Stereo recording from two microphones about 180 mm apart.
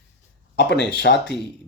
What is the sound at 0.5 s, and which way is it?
Speech, 70° left (ahead or behind).